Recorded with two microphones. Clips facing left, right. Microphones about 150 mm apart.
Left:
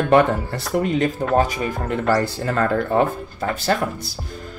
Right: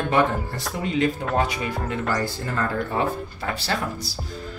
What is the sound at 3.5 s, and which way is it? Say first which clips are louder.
Speech: left 6 dB; 50° left (ahead or behind).